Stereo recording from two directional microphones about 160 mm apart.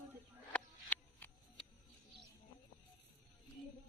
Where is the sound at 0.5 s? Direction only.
10° left (ahead or behind).